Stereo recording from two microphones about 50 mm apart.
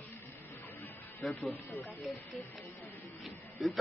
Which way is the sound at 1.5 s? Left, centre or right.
Left.